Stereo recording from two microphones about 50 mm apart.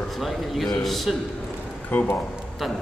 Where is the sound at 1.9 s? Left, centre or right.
Left.